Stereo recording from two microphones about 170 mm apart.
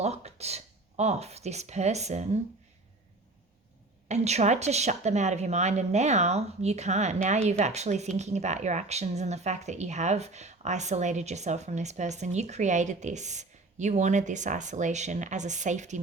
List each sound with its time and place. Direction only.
0.0 s speech: 40° right (ahead or behind)
4.1 s a woman's voice: 40° right (ahead or behind)